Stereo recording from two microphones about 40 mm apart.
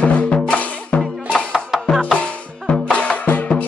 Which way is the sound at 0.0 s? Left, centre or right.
Left.